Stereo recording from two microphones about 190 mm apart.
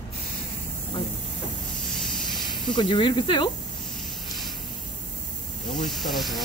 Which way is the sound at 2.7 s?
25° left (ahead or behind).